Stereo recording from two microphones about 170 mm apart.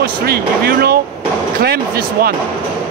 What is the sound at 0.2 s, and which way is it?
Speech, 65° right (ahead or behind).